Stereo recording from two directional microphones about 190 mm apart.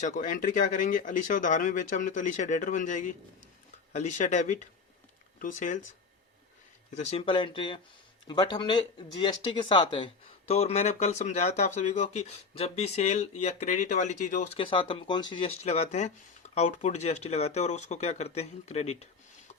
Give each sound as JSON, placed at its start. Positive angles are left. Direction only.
{"t": 0.0, "sound": "speech", "side_deg": 45}
{"t": 6.9, "sound": "speech", "side_deg": 35}